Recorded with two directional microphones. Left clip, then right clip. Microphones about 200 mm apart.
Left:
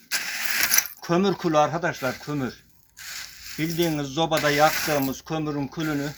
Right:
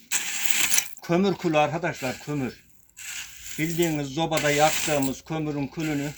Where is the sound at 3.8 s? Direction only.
10° right (ahead or behind).